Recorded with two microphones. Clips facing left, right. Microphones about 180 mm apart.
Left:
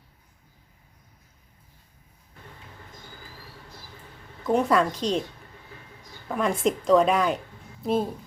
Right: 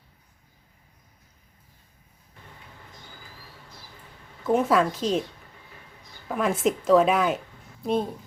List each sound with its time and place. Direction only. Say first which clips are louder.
4.4 s a woman's voice: even; 5° right (ahead or behind)
6.2 s a woman's voice: even; 5° right (ahead or behind)